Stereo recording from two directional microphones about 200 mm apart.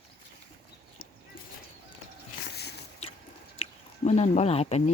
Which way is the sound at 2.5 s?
55° left (ahead or behind).